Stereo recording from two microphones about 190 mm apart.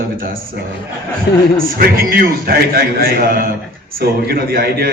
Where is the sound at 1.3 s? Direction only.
60° left (ahead or behind).